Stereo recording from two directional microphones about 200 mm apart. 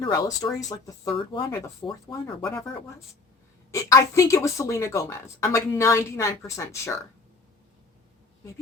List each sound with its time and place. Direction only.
0.0 s speech: 20° left (ahead or behind)
3.7 s speech: 15° left (ahead or behind)